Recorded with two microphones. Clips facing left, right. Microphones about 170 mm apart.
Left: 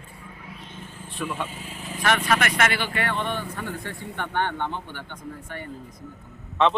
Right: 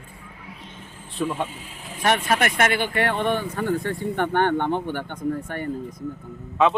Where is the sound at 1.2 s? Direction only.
30° right (ahead or behind).